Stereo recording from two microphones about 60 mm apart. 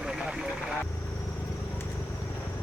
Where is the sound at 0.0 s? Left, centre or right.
Centre.